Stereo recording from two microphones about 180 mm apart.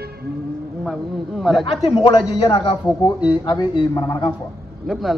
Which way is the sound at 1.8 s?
30° left (ahead or behind).